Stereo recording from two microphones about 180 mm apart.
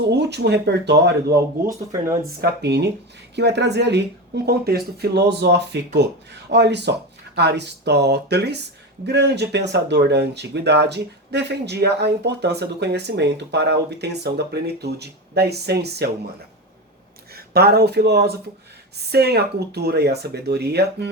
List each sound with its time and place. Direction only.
0.1 s speech: 70° right (ahead or behind)
1.6 s speech: 15° right (ahead or behind)
2.4 s speech: 70° right (ahead or behind)
17.3 s speech: 60° right (ahead or behind)